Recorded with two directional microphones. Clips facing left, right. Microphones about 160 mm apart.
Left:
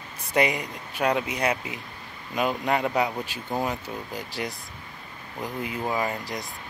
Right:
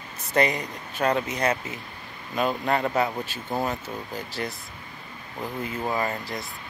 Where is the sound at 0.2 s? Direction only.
10° left (ahead or behind).